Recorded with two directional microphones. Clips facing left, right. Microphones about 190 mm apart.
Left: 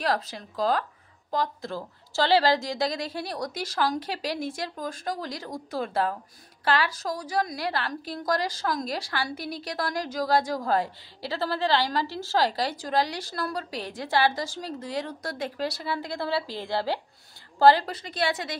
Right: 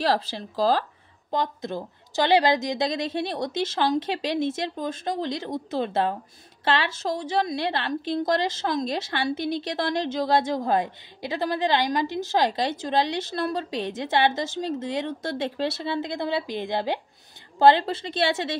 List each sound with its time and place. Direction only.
0.0 s a woman's voice: 30° right (ahead or behind)